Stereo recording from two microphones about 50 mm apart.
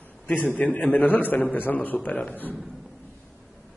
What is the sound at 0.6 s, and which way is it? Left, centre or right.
A man's voice, left.